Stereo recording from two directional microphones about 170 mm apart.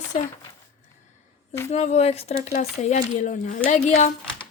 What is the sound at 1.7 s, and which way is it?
Speech, 40° left (ahead or behind).